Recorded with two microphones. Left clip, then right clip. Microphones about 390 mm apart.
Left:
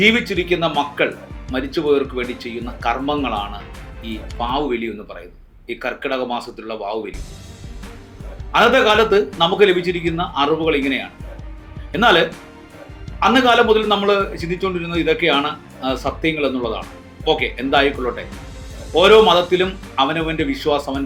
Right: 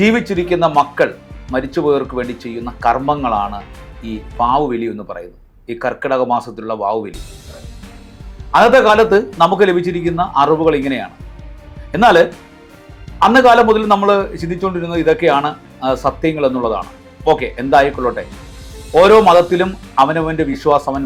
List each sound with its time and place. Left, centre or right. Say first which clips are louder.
0.0 s a man's voice: right 1 dB; right
8.5 s a man's voice: right 4 dB; right
11.9 s music: right 4 dB; right
13.3 s a man's voice: right 4 dB; right